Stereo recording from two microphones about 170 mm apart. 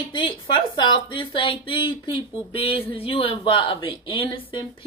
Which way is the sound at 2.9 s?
35° left (ahead or behind).